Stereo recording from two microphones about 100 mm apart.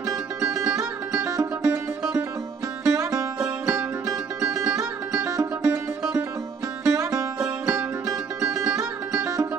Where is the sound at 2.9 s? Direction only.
35° right (ahead or behind).